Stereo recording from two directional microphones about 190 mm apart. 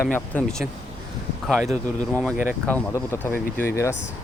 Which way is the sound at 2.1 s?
5° left (ahead or behind).